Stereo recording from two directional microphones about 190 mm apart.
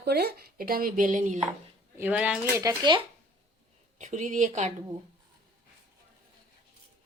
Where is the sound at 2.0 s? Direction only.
10° right (ahead or behind).